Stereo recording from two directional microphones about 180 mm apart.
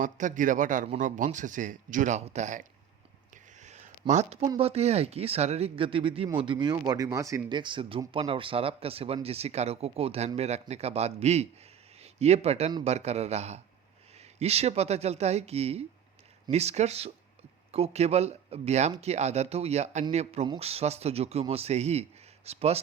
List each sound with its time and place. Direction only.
0.0 s speech: 45° right (ahead or behind)
3.6 s a sound: 40° right (ahead or behind)
4.4 s speech: 30° right (ahead or behind)